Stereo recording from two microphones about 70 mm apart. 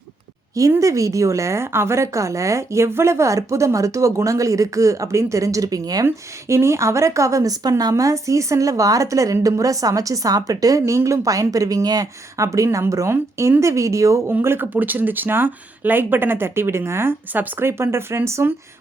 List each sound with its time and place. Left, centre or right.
0.8 s a woman's voice: right
6.1 s a woman's voice: right
14.3 s speech: right